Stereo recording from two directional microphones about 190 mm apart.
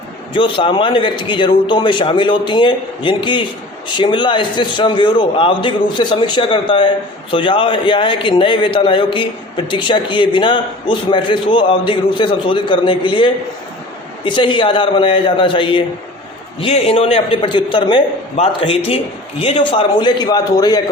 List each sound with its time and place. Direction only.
0.3 s a man's voice: 25° left (ahead or behind)